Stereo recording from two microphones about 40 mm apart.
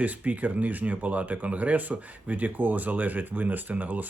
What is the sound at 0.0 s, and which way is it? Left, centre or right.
Speech, right.